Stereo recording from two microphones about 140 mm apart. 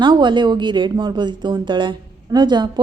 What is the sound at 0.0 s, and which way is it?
Speech, 35° right (ahead or behind).